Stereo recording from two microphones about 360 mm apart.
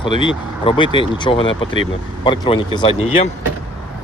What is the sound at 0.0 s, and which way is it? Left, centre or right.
Speech, centre.